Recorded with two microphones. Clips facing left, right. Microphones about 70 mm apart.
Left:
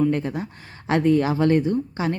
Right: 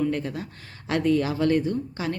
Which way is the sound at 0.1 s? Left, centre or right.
Left.